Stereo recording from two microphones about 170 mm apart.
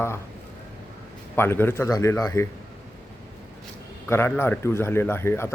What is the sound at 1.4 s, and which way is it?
Speech, 15° left (ahead or behind).